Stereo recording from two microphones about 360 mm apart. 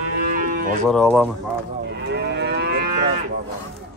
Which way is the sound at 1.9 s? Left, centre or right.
Right.